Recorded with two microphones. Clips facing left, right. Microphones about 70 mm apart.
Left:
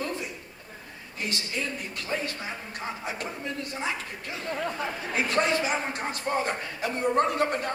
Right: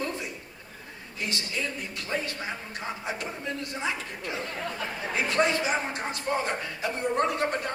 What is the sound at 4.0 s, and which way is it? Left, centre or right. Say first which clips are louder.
Speech: right 2 dB; right.